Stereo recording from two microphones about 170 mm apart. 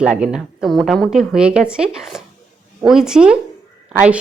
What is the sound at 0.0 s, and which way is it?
A woman's voice, 5° right (ahead or behind).